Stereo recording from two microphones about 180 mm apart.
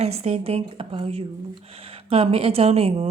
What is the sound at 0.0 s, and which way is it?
Speech, 35° right (ahead or behind).